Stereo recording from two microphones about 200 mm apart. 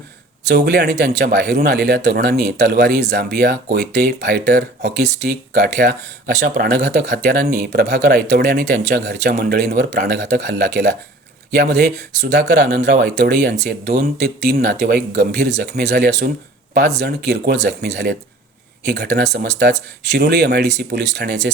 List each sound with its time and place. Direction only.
0.5 s speech: 55° right (ahead or behind)